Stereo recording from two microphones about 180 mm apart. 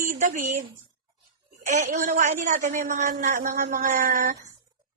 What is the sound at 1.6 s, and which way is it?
A woman's voice, 45° right (ahead or behind).